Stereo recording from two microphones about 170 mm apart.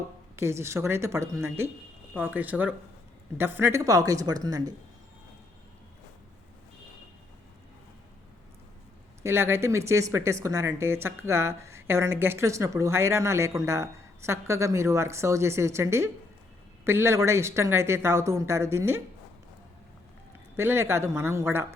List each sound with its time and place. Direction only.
0.3 s speech: 15° right (ahead or behind)
9.2 s speech: 15° right (ahead or behind)
20.6 s speech: 15° right (ahead or behind)